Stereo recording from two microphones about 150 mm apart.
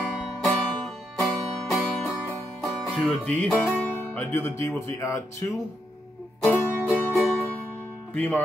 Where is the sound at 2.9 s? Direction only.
5° left (ahead or behind).